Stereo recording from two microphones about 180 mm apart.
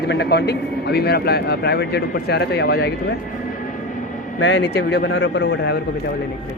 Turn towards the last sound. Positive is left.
turn(degrees=75)  # may be behind; listen again after turning